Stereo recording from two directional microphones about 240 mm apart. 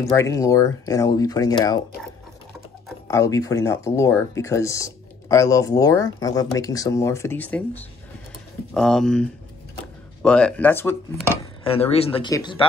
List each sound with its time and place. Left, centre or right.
0.1 s speech: centre
3.1 s speech: centre
11.6 s speech: left